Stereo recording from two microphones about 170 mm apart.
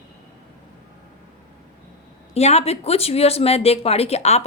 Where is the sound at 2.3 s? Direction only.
40° left (ahead or behind).